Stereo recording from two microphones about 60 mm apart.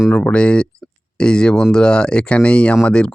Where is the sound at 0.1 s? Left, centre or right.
Left.